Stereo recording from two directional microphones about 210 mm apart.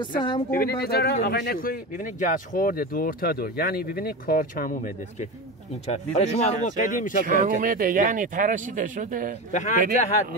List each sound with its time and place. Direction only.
0.5 s speech: 45° left (ahead or behind)
5.9 s speech: 30° left (ahead or behind)
7.2 s speech: 40° right (ahead or behind)
9.5 s speech: 35° left (ahead or behind)